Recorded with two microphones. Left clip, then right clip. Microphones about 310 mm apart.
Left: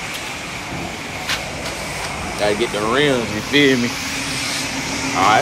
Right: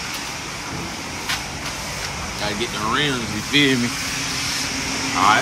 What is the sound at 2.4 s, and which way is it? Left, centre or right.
Speech, centre.